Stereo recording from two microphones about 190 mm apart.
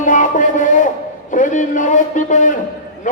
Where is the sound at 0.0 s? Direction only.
40° left (ahead or behind).